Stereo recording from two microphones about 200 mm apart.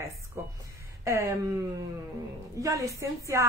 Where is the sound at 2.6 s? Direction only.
15° right (ahead or behind).